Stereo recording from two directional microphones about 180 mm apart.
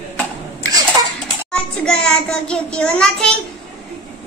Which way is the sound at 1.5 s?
5° left (ahead or behind).